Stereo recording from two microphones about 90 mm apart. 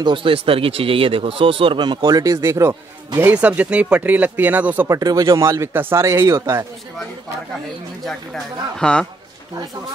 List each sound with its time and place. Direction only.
0.0 s speech: 70° right (ahead or behind); by 2.7 s 35° right (ahead or behind)
3.2 s speech: 20° right (ahead or behind)
4.8 s speech: 45° right (ahead or behind)
8.7 s a man's voice: 10° left (ahead or behind)